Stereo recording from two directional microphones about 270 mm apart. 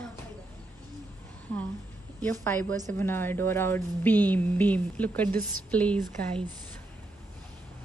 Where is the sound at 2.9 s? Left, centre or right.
Centre.